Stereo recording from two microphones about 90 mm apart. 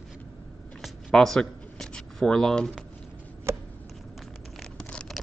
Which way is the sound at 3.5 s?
30° right (ahead or behind).